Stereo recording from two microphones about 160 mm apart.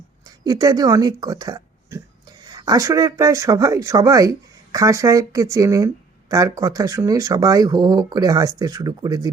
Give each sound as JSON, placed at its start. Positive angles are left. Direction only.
{"t": 0.3, "sound": "speech", "side_deg": -25}